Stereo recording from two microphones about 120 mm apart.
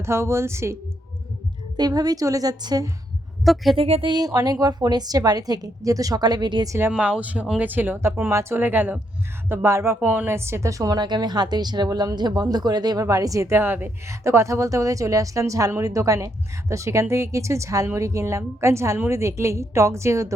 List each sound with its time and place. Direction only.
0.0 s a woman's voice: 20° right (ahead or behind)
1.7 s a woman's voice: 35° right (ahead or behind)
3.4 s speech: centre (ahead or behind)
3.8 s speech: 60° right (ahead or behind)
4.0 s a woman's voice: 35° right (ahead or behind)
6.9 s a woman's voice: 10° right (ahead or behind)